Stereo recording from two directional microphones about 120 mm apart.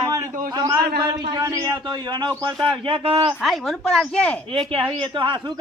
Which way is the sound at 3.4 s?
Centre (ahead or behind).